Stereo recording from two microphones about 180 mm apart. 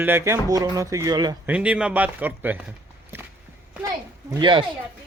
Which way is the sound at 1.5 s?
5° right (ahead or behind).